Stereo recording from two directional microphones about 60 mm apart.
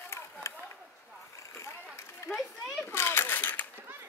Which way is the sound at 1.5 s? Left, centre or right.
Left.